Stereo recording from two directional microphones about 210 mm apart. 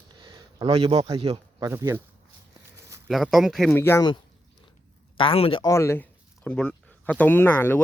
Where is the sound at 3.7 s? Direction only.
10° left (ahead or behind).